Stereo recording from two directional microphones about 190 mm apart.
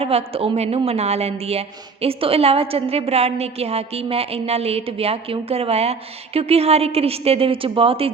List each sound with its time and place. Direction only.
0.0 s a woman's voice: 30° right (ahead or behind)